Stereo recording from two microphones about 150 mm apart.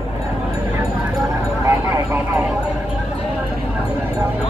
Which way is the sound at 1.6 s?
15° right (ahead or behind).